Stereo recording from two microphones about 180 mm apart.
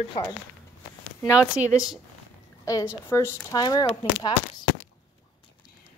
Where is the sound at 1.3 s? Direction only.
5° right (ahead or behind).